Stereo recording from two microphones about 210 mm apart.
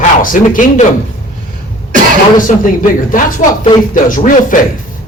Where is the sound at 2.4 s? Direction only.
40° left (ahead or behind).